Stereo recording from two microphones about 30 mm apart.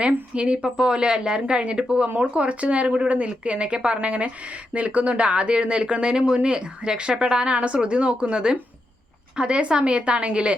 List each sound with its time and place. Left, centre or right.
0.3 s a woman's voice: right
2.3 s speech: right
3.9 s speech: right
5.2 s a woman's voice: right
7.5 s a woman's voice: right